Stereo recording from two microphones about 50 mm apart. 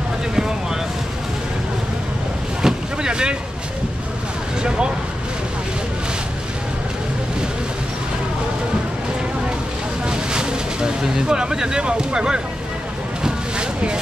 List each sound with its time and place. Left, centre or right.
2.6 s boat: centre
4.6 s speech: centre
10.0 s speech: centre
13.2 s vehicle: centre